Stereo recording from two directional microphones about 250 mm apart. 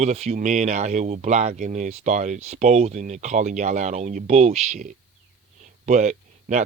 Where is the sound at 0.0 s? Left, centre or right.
Right.